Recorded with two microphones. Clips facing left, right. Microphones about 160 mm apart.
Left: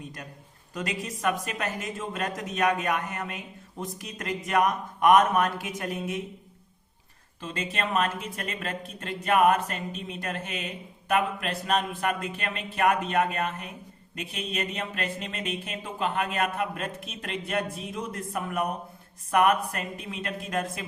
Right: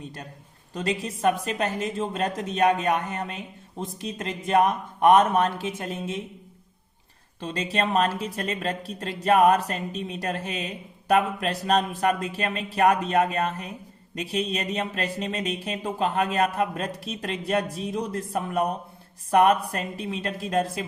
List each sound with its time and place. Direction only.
0.7 s speech: 30° right (ahead or behind)
7.4 s a woman's voice: 35° right (ahead or behind)